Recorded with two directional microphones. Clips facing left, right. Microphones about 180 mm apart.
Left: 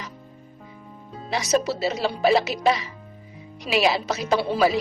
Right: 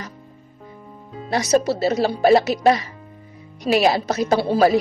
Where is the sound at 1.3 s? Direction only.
45° right (ahead or behind).